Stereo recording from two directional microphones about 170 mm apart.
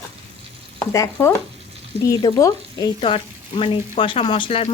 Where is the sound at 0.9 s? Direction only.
20° left (ahead or behind).